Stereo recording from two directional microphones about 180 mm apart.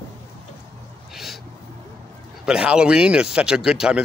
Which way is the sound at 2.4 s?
5° right (ahead or behind).